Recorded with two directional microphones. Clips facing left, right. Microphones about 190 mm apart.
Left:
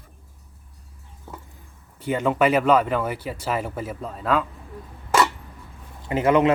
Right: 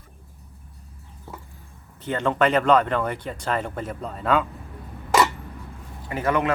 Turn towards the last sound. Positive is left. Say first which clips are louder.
# left 5 dB
turn(degrees=20)  # may be behind; listen again after turning